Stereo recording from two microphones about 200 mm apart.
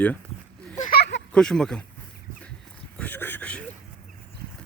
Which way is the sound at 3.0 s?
10° left (ahead or behind).